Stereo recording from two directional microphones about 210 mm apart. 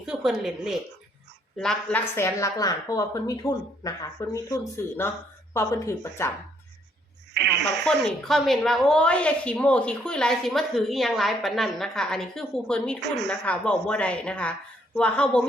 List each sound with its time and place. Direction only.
0.0 s a woman's voice: centre (ahead or behind)
7.3 s speech: 55° right (ahead or behind)
7.9 s a woman's voice: centre (ahead or behind)
13.0 s speech: 55° right (ahead or behind)
13.3 s a woman's voice: 5° left (ahead or behind)